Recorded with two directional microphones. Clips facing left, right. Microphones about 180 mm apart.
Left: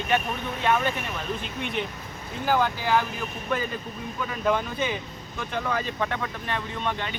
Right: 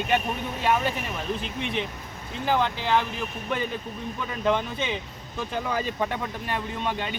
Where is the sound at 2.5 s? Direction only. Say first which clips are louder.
Left 1 dB; 5° left (ahead or behind).